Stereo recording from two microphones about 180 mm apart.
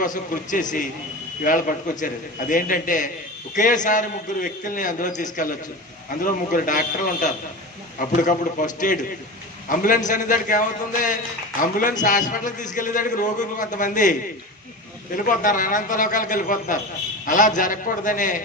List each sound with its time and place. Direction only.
0.0 s a man's voice: 45° left (ahead or behind)
11.6 s a man's voice: 50° left (ahead or behind)